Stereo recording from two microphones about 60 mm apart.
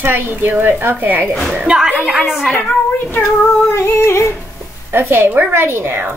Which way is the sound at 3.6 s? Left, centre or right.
Left.